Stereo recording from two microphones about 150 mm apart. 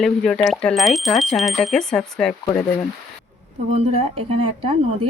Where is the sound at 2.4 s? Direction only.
20° left (ahead or behind).